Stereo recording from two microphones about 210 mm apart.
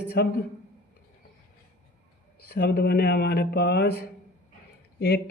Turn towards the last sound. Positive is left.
turn(degrees=50)  # may be behind; listen again after turning